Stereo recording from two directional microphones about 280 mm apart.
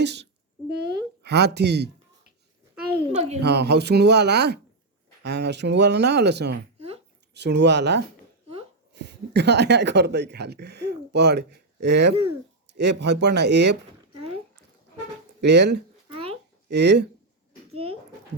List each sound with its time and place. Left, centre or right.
0.0 s speech: right
3.1 s speech: right
3.4 s speech: right
6.7 s a sound: right
7.3 s speech: right
15.4 s speech: right
16.0 s a sound: centre
16.6 s speech: right